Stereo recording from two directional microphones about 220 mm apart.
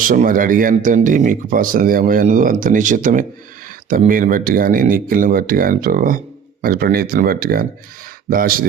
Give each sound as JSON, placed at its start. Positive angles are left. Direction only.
{"t": 0.0, "sound": "speech", "side_deg": -40}